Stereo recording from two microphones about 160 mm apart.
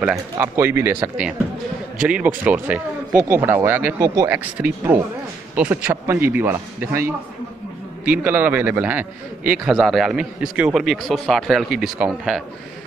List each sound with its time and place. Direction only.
0.0 s a man's voice: 10° right (ahead or behind)
4.3 s a man's voice: 10° right (ahead or behind)